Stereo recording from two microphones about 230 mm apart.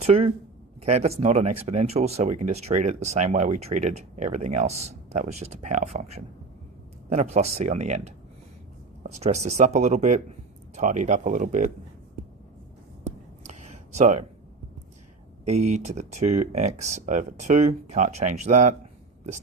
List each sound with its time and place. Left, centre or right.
0.0 s speech: right
9.1 s speech: right
13.5 s a sound: right
15.4 s speech: right